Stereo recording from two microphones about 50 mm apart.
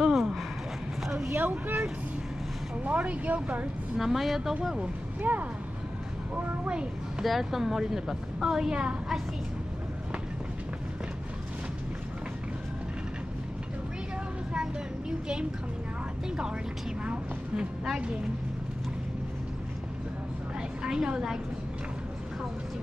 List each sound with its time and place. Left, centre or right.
0.0 s a sound: centre
1.4 s speech: right
2.8 s speech: right
4.0 s speech: centre
5.2 s speech: right
6.7 s a child's voice: right
7.2 s a woman's voice: centre
14.5 s a sound: centre
17.0 s a sound: right
20.8 s a woman's voice: centre